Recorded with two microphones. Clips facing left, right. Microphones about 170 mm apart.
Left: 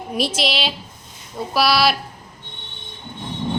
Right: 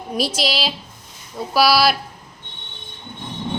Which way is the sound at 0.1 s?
Centre (ahead or behind).